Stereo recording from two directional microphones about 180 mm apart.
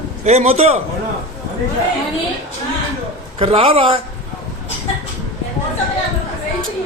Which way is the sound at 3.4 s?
30° right (ahead or behind).